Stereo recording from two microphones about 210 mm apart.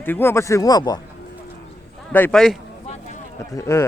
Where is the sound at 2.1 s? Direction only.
5° left (ahead or behind).